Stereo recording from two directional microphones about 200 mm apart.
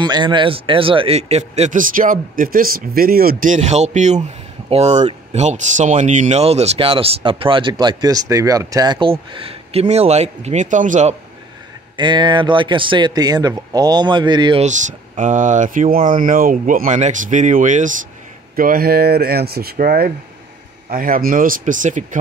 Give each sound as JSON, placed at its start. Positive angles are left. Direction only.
{"t": 0.0, "sound": "speech", "side_deg": -20}
{"t": 12.0, "sound": "speech", "side_deg": -20}
{"t": 14.6, "sound": "speech", "side_deg": -35}